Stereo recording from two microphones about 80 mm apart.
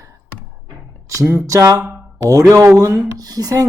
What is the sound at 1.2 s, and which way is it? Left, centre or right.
Speech, right.